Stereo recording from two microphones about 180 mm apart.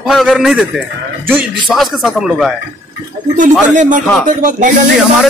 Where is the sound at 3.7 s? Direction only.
45° right (ahead or behind).